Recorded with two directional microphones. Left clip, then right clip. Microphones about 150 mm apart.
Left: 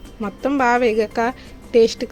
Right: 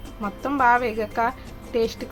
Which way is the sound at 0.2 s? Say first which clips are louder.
Left 3 dB; 40° left (ahead or behind).